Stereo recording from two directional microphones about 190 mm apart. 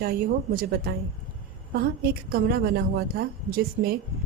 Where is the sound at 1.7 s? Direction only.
55° right (ahead or behind).